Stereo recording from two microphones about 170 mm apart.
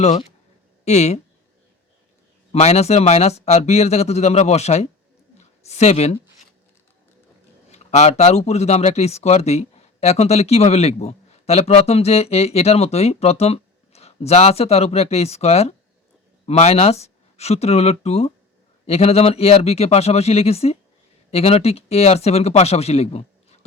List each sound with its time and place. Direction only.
0.0 s speech: 40° left (ahead or behind)
2.5 s speech: 40° left (ahead or behind)
7.7 s speech: 40° left (ahead or behind)